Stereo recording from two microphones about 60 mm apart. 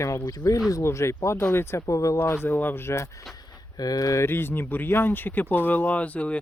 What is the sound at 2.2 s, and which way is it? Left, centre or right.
Speech, left.